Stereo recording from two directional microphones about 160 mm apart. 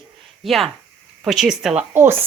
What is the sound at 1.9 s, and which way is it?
Speech, 15° right (ahead or behind).